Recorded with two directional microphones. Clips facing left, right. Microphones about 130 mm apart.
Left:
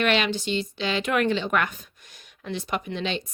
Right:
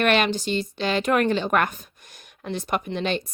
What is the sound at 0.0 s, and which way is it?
A woman's voice, 50° right (ahead or behind).